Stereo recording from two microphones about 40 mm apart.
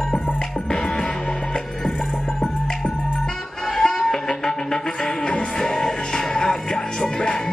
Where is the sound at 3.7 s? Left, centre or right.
Centre.